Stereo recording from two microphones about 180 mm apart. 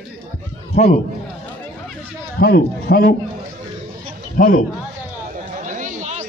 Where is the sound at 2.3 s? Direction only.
55° left (ahead or behind).